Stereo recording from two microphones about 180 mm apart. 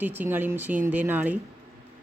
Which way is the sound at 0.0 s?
10° right (ahead or behind).